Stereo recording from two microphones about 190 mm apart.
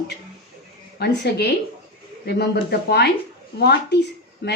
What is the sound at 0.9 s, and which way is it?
Speech, 60° left (ahead or behind).